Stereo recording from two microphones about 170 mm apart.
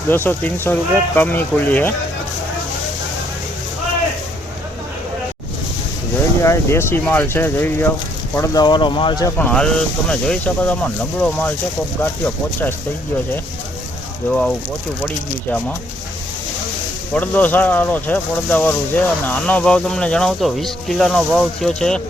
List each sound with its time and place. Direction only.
0.1 s speech: 10° left (ahead or behind)
6.4 s speech: 15° left (ahead or behind)
8.4 s speech: 25° left (ahead or behind)
9.4 s speech: 5° left (ahead or behind)
14.3 s speech: 5° left (ahead or behind)
17.2 s speech: 10° left (ahead or behind)